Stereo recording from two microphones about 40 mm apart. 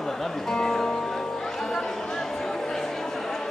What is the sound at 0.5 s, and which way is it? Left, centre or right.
Music, centre.